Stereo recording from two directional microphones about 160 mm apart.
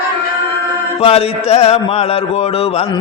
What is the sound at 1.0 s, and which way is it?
Mantra, 40° left (ahead or behind).